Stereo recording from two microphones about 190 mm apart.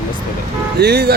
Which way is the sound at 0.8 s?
55° right (ahead or behind).